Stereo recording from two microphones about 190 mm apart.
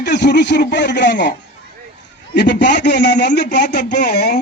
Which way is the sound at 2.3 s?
65° left (ahead or behind).